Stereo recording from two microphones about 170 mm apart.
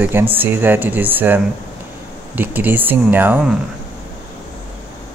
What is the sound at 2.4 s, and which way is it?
Speech, 10° right (ahead or behind).